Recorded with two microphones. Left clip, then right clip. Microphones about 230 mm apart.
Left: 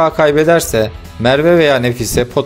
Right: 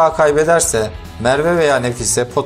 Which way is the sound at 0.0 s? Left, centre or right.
Left.